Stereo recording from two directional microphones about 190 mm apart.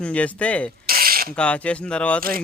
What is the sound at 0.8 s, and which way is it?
Mechanisms, 50° right (ahead or behind).